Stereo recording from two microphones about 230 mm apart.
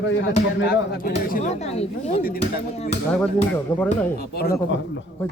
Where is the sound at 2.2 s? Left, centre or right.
Left.